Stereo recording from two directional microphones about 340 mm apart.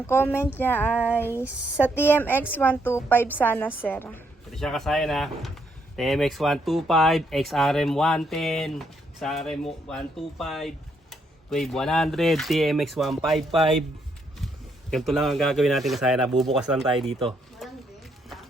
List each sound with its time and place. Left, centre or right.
0.1 s a woman's voice: centre
14.4 s a woman's voice: centre
17.2 s a sound: centre